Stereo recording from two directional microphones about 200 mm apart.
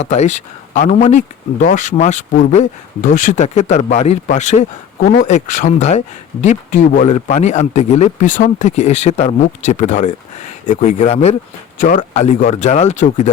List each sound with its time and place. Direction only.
0.0 s speech: 35° left (ahead or behind)